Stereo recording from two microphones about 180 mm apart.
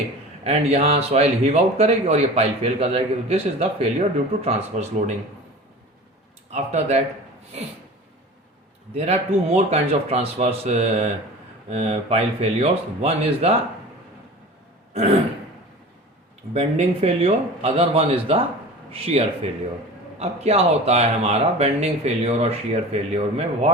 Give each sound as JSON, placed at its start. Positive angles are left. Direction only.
{"t": 0.4, "sound": "speech", "side_deg": -35}
{"t": 6.5, "sound": "speech", "side_deg": -40}
{"t": 9.0, "sound": "speech", "side_deg": -35}
{"t": 16.6, "sound": "speech", "side_deg": -35}